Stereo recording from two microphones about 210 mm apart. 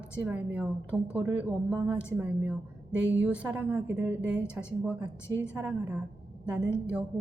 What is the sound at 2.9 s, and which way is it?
Speech, 60° right (ahead or behind).